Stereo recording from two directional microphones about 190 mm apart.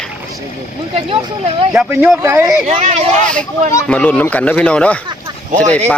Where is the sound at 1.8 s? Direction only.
10° right (ahead or behind).